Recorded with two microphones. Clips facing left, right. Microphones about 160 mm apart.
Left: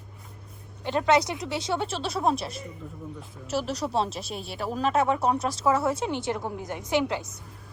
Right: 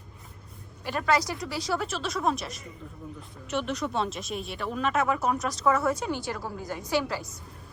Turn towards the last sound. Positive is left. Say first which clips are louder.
# left 2 dB
turn(degrees=20)  # may be behind; listen again after turning